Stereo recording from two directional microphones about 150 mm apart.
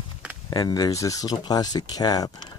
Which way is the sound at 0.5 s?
25° left (ahead or behind).